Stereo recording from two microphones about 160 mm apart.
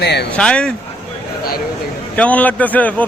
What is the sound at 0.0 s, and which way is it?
Speech, 90° left.